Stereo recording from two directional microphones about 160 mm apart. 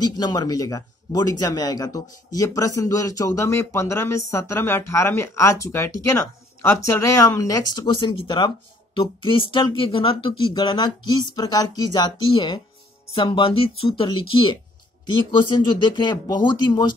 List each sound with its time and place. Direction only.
0.2 s speech: 25° left (ahead or behind)